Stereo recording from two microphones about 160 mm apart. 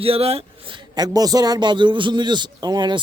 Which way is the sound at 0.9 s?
25° right (ahead or behind).